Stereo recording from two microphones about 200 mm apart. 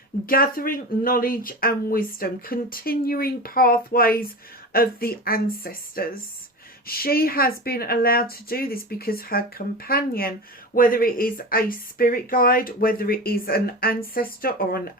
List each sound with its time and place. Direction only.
0.3 s speech: 45° left (ahead or behind)